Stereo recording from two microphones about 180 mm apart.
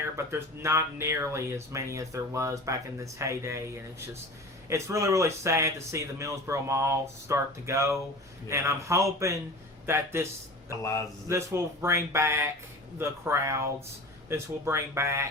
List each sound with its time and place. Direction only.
0.0 s speech: 15° right (ahead or behind)
4.7 s speech: 15° right (ahead or behind)
11.3 s speech: 15° right (ahead or behind)